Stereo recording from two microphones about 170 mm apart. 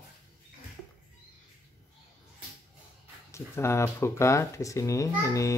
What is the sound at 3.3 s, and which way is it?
Speech, 15° left (ahead or behind).